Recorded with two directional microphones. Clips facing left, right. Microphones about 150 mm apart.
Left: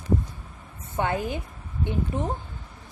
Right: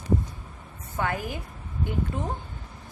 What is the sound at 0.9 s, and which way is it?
A woman's voice, 25° left (ahead or behind).